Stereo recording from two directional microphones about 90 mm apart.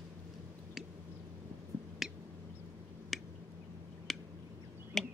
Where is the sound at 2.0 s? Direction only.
5° right (ahead or behind).